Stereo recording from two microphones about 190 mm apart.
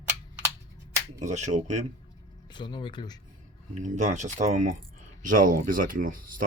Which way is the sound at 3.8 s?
40° right (ahead or behind).